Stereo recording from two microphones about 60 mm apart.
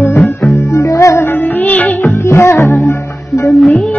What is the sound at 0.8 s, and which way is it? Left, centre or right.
Music, left.